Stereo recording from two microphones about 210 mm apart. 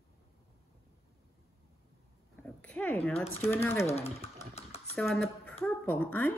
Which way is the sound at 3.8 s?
30° left (ahead or behind).